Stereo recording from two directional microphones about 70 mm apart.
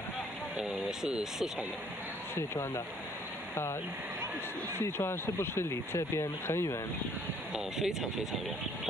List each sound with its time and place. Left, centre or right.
0.6 s speech: centre
2.3 s speech: left
4.7 s speech: left
7.5 s speech: centre